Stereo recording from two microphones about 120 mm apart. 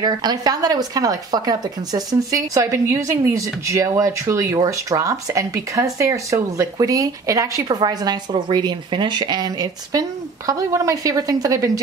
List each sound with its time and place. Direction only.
0.0 s speech: 35° right (ahead or behind)